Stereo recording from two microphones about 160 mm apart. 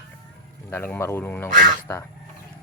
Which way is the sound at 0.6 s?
15° left (ahead or behind).